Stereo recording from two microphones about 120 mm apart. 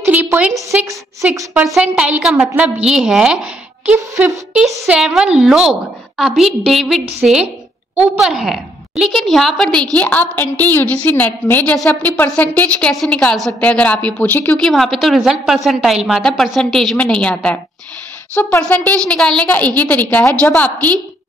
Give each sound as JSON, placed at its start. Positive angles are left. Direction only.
{"t": 0.0, "sound": "a sound", "side_deg": -15}
{"t": 0.7, "sound": "a woman's voice", "side_deg": -15}
{"t": 3.8, "sound": "a sound", "side_deg": -10}
{"t": 4.6, "sound": "a woman's voice", "side_deg": -10}
{"t": 14.7, "sound": "a woman's voice", "side_deg": 0}
{"t": 18.6, "sound": "a woman's voice", "side_deg": 10}